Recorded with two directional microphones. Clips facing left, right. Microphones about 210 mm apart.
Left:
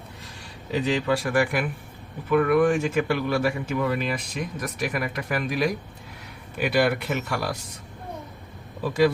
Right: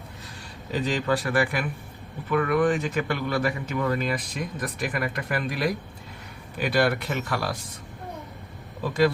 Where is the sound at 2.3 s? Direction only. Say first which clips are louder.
Left 3 dB; 10° left (ahead or behind).